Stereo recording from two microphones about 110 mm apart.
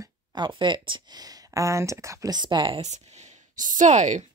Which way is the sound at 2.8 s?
90° right.